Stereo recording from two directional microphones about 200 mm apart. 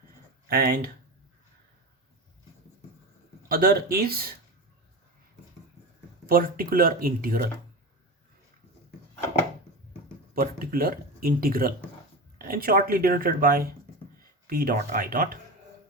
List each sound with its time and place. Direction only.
0.4 s speech: 50° right (ahead or behind)
3.5 s speech: 50° right (ahead or behind)
6.2 s speech: 45° right (ahead or behind)
10.3 s speech: 45° right (ahead or behind)